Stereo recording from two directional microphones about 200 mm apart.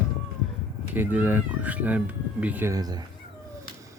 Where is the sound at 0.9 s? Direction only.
10° right (ahead or behind).